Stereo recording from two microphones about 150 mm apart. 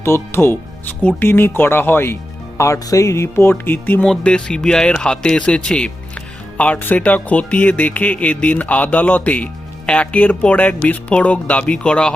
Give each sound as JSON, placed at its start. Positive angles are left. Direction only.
{"t": 0.0, "sound": "speech", "side_deg": 15}